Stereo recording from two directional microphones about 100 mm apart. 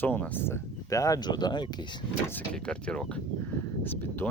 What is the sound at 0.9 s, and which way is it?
Speech, 35° left (ahead or behind).